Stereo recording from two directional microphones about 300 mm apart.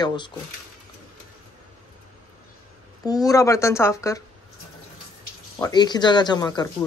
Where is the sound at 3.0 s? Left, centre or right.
Centre.